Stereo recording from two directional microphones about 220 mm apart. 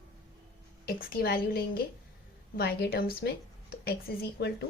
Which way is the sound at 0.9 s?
40° left (ahead or behind).